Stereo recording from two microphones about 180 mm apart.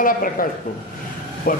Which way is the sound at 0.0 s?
50° left (ahead or behind).